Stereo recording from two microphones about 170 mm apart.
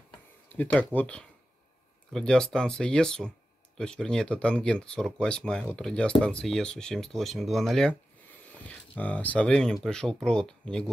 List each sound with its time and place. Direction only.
0.5 s speech: 10° left (ahead or behind)